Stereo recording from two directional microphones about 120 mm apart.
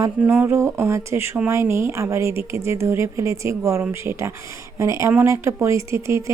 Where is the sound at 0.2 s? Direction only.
15° right (ahead or behind).